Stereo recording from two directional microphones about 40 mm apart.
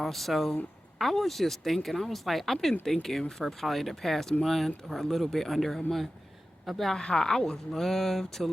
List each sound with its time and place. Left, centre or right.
0.0 s speech: centre
6.9 s speech: centre